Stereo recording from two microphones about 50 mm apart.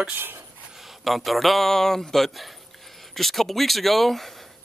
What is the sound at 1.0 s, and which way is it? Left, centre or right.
A man's voice, centre.